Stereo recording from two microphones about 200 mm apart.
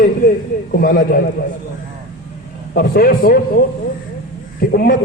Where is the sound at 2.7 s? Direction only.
50° left (ahead or behind).